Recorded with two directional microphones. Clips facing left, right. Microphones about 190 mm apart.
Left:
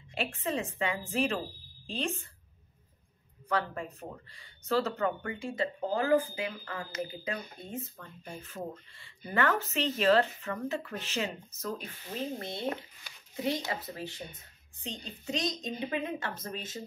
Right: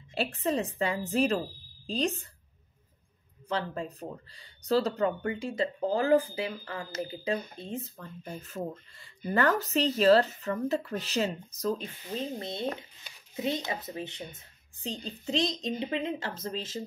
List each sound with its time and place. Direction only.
0.1 s speech: 40° right (ahead or behind)
3.4 s a woman's voice: 30° right (ahead or behind)
12.4 s a woman's voice: 20° right (ahead or behind)
14.8 s a woman's voice: 30° right (ahead or behind)